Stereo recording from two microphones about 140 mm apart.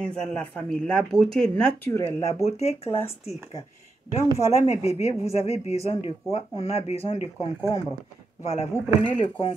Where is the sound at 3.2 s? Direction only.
50° left (ahead or behind).